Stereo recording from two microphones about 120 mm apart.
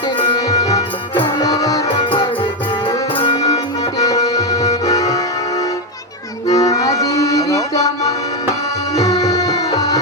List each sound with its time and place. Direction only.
0.2 s music: 40° left (ahead or behind)
2.0 s music: 40° left (ahead or behind)
3.9 s music: 30° left (ahead or behind)
6.5 s music: 30° left (ahead or behind)